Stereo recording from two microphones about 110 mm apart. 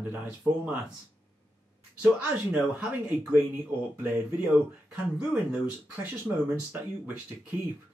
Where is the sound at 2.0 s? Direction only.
15° right (ahead or behind).